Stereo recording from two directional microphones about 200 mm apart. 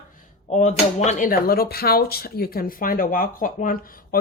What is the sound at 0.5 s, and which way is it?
A woman's voice, 35° left (ahead or behind).